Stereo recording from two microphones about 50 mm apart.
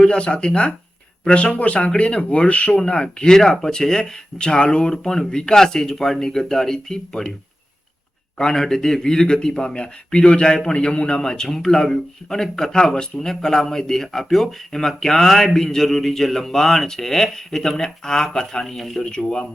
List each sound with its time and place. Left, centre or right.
0.0 s a man's voice: centre
8.4 s a man's voice: centre